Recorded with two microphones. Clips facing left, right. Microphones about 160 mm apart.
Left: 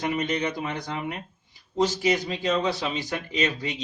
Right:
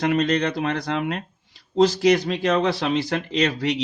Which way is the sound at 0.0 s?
80° right.